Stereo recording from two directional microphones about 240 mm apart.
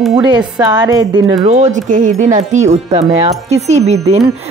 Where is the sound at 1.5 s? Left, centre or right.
Right.